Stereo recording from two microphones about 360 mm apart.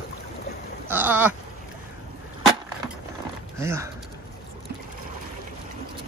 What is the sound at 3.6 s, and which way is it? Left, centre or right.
Speech, centre.